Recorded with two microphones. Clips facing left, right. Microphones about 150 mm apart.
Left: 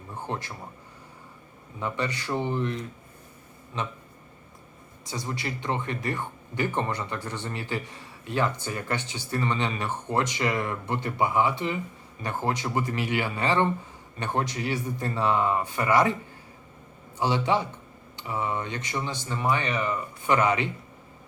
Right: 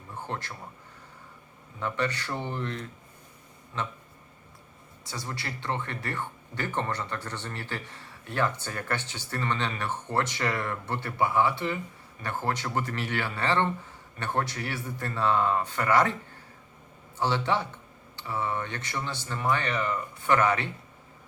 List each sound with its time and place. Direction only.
0.1 s a man's voice: 15° left (ahead or behind)
1.8 s speech: 15° left (ahead or behind)
5.0 s speech: 15° left (ahead or behind)
17.2 s speech: 15° left (ahead or behind)